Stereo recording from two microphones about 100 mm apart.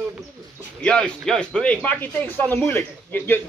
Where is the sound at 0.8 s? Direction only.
10° left (ahead or behind).